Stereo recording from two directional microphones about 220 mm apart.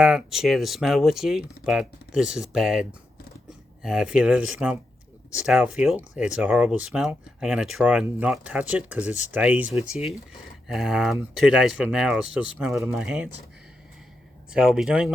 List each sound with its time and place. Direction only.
0.0 s speech: centre (ahead or behind)
3.8 s speech: 5° right (ahead or behind)
14.5 s speech: 5° right (ahead or behind)